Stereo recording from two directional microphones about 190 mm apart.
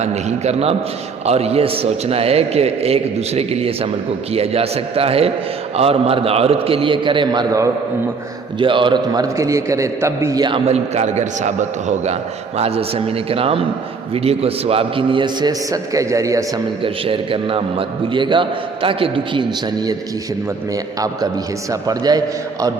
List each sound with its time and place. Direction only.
0.0 s a man's voice: 35° right (ahead or behind); by 10.6 s 20° right (ahead or behind)
10.7 s a man's voice: 35° right (ahead or behind); by 16.4 s 15° right (ahead or behind)
16.8 s a man's voice: 30° right (ahead or behind)
21.0 s a man's voice: 20° right (ahead or behind)